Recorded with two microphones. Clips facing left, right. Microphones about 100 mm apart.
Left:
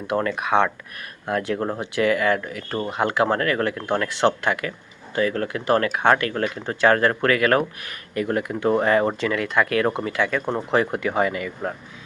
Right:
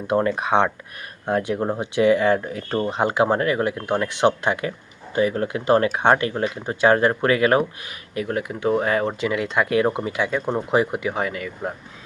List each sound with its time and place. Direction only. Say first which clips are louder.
0.1 s speech: right 2 dB; 25° right (ahead or behind)
1.5 s speech: right 2 dB; 10° right (ahead or behind)
1.8 s speech: right 4 dB; 20° right (ahead or behind); by 9.1 s centre (ahead or behind)
9.2 s speech: even; 15° right (ahead or behind); by 11.7 s centre (ahead or behind)